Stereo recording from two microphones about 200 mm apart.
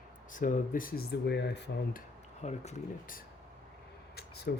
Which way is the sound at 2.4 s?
35° left (ahead or behind).